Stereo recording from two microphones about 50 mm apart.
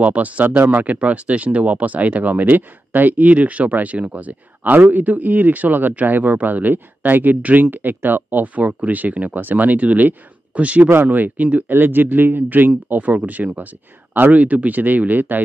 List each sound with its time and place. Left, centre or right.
0.0 s speech: right
11.7 s speech: right